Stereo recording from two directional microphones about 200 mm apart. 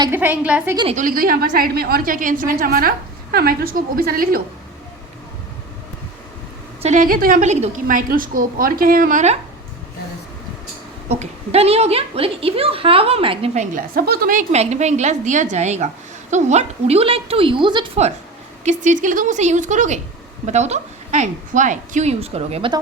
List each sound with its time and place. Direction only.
0.1 s a woman's voice: 10° right (ahead or behind)
0.9 s a woman's voice: 45° right (ahead or behind)
6.8 s a woman's voice: 40° right (ahead or behind)
11.1 s a woman's voice: 30° right (ahead or behind)